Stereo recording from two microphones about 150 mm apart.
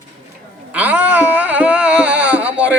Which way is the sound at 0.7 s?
10° right (ahead or behind).